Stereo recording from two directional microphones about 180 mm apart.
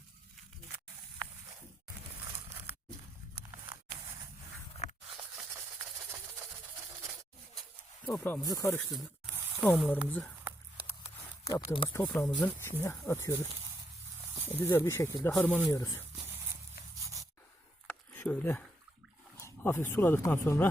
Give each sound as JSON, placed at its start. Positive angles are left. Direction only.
{"t": 8.0, "sound": "speech", "side_deg": 10}
{"t": 8.8, "sound": "speech", "side_deg": 0}
{"t": 9.9, "sound": "speech", "side_deg": 10}
{"t": 11.4, "sound": "speech", "side_deg": 20}
{"t": 17.0, "sound": "rub", "side_deg": -15}
{"t": 17.8, "sound": "a sound", "side_deg": 10}
{"t": 19.4, "sound": "speech", "side_deg": 15}